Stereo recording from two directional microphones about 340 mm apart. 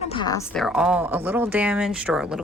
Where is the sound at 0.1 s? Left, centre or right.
Centre.